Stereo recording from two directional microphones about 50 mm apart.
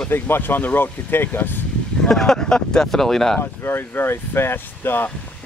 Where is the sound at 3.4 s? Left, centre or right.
Left.